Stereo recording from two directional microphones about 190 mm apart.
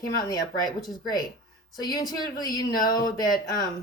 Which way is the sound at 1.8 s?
20° left (ahead or behind).